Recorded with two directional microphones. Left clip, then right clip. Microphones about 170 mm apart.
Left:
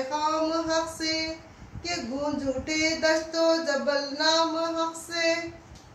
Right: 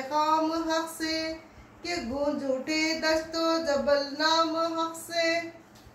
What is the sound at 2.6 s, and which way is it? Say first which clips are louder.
Speech: left 4 dB; 10° right (ahead or behind).